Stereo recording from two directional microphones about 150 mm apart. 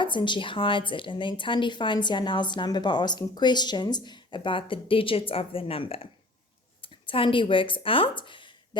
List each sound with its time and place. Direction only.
0.0 s a woman's voice: 30° left (ahead or behind)